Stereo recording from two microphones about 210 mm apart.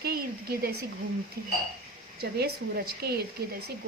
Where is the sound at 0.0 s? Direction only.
50° right (ahead or behind).